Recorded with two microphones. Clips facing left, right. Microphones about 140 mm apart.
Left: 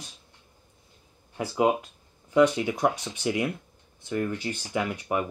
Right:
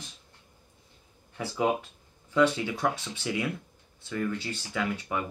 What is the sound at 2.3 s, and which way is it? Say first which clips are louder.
Speech: left 3 dB; 15° left (ahead or behind).